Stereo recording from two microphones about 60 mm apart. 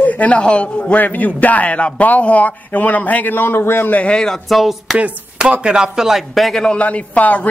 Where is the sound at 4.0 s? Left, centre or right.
Centre.